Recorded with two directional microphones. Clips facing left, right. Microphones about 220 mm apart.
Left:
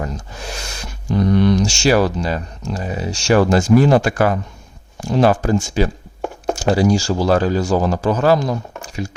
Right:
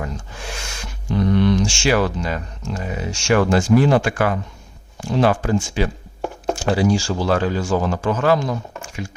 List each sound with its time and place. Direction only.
0.0 s speech: 40° left (ahead or behind)